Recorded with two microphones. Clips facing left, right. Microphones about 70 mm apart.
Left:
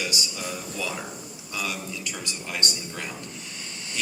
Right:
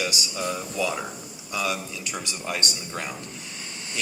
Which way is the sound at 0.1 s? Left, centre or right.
Right.